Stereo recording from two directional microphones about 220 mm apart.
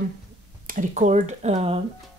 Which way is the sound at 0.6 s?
35° right (ahead or behind).